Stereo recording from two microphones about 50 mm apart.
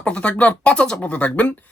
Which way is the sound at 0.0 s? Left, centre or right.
Left.